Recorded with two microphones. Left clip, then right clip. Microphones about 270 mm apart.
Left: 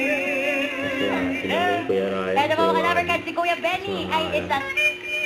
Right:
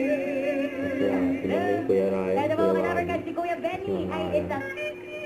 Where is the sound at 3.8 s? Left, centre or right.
Left.